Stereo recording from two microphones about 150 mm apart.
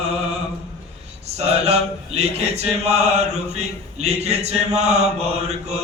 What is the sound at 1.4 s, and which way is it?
Mantra, 45° right (ahead or behind).